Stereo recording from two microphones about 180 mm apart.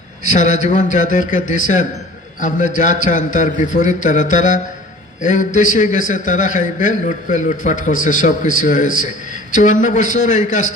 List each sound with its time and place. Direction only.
0.3 s a man's voice: 40° left (ahead or behind)